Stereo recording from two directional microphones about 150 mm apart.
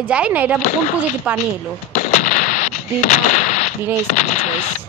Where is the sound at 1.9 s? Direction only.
55° left (ahead or behind).